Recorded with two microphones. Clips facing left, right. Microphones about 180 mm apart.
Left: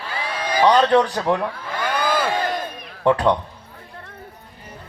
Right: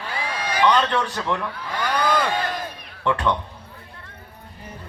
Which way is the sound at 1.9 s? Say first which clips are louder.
Even; 5° left (ahead or behind).